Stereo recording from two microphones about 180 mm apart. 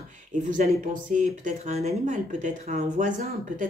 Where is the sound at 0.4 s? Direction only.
45° right (ahead or behind).